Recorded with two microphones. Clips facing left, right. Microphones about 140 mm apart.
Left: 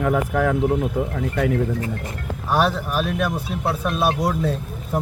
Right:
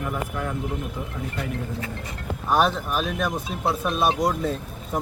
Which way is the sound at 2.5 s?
5° left (ahead or behind).